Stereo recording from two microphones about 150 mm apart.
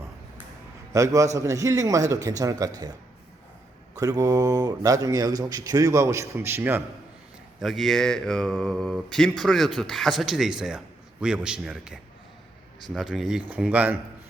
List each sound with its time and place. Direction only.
0.9 s speech: 20° right (ahead or behind)
3.9 s speech: 25° right (ahead or behind)
7.6 s speech: centre (ahead or behind)